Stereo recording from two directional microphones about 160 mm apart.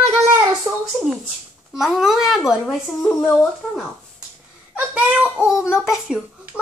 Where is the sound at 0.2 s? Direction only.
15° right (ahead or behind).